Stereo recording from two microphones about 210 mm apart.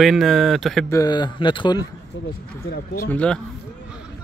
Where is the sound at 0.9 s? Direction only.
15° left (ahead or behind).